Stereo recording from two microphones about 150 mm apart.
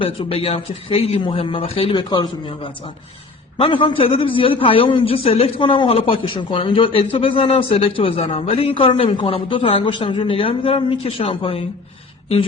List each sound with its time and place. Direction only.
0.0 s a man's voice: 40° left (ahead or behind)